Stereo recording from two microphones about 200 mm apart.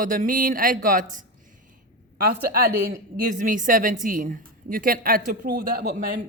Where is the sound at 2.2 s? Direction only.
50° right (ahead or behind).